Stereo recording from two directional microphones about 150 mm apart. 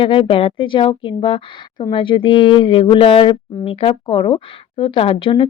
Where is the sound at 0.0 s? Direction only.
35° left (ahead or behind).